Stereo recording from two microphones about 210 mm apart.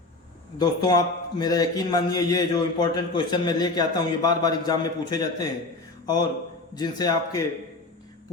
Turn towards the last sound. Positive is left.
turn(degrees=20)  # may be behind; listen again after turning